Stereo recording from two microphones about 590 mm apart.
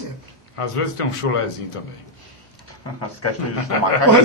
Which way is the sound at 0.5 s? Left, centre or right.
Left.